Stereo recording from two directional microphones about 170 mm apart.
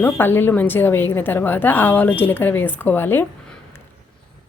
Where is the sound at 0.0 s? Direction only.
10° left (ahead or behind).